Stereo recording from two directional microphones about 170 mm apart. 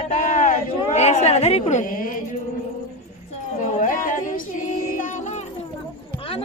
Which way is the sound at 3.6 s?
50° left (ahead or behind).